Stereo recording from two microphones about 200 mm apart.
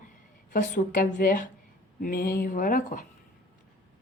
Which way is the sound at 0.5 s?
45° left (ahead or behind).